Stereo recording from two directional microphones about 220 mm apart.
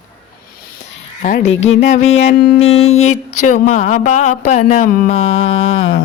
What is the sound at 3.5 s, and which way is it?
Speech, 30° left (ahead or behind).